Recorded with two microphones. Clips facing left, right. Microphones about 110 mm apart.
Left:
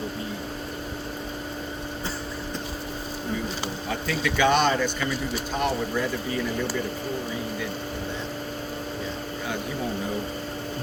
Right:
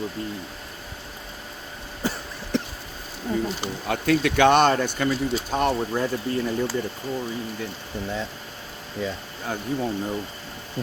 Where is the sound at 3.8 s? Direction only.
60° right (ahead or behind).